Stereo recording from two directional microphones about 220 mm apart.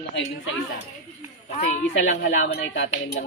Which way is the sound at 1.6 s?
30° left (ahead or behind).